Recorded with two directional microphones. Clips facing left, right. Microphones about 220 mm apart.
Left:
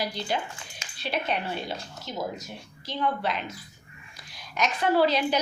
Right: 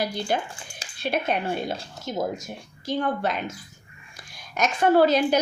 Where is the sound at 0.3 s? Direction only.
50° right (ahead or behind).